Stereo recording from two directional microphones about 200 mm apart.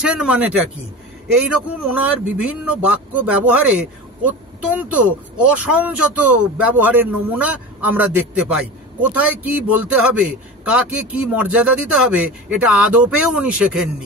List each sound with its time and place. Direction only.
0.0 s a man's voice: 5° right (ahead or behind)